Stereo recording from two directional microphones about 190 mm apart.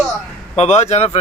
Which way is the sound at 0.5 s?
35° left (ahead or behind).